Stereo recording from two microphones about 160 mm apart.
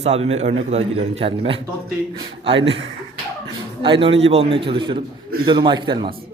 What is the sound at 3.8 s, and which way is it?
A man's voice, 35° right (ahead or behind).